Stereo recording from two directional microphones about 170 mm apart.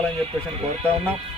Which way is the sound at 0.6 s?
35° right (ahead or behind).